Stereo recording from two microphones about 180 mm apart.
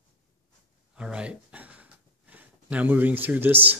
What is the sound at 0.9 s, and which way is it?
Speech, 5° right (ahead or behind).